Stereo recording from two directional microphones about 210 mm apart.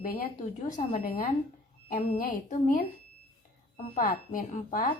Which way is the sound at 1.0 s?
40° left (ahead or behind).